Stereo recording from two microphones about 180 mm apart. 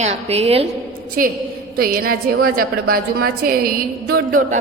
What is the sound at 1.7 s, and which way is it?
A woman's voice, 55° right (ahead or behind).